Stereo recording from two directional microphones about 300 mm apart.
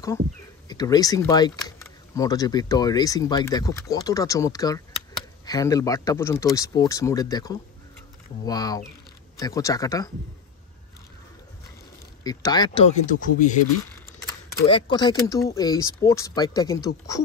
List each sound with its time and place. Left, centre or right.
0.7 s speech: centre
12.2 s speech: centre
14.7 s speech: centre